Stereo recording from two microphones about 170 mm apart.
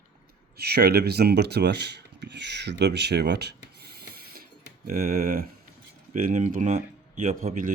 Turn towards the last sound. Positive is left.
turn(degrees=-50)  # may be behind; listen again after turning